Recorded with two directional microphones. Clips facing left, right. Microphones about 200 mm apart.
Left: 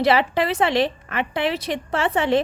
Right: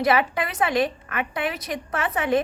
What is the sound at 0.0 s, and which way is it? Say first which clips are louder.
A woman's voice: left 3 dB; 30° left (ahead or behind).